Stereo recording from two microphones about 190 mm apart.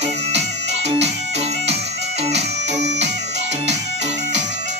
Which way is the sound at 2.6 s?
65° right (ahead or behind).